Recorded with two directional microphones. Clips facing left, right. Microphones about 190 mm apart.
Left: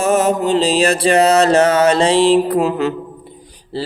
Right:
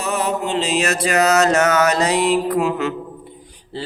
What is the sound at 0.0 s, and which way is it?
Music, 45° left (ahead or behind).